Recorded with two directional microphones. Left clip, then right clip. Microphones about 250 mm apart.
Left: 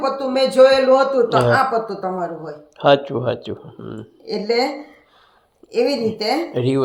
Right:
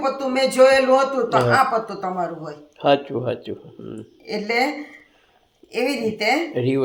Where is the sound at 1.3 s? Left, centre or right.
Centre.